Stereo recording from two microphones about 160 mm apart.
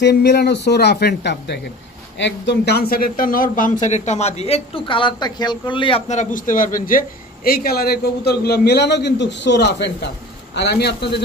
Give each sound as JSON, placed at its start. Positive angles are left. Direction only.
{"t": 0.0, "sound": "a man's voice", "side_deg": 90}
{"t": 6.0, "sound": "a man's voice", "side_deg": 50}